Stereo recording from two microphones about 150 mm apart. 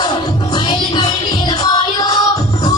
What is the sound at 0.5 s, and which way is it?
Music, 30° left (ahead or behind).